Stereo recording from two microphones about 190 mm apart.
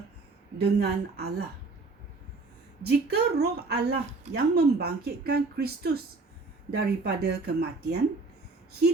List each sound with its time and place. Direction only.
0.6 s speech: 55° right (ahead or behind)
2.8 s speech: 60° right (ahead or behind)